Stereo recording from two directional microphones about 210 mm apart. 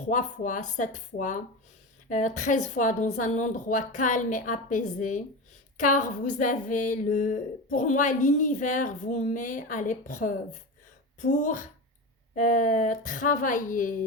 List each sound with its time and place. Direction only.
0.0 s a woman's voice: 35° left (ahead or behind)